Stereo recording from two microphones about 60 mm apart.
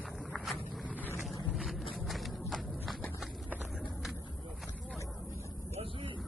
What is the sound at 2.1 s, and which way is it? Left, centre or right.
Walk, centre.